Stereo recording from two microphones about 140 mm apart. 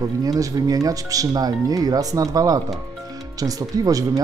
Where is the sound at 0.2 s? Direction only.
25° right (ahead or behind).